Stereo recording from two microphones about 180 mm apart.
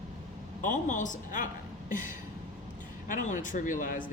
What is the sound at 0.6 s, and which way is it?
A woman's voice, 45° left (ahead or behind).